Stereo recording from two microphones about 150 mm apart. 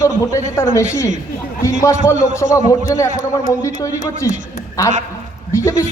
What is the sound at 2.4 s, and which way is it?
Speech, 40° left (ahead or behind).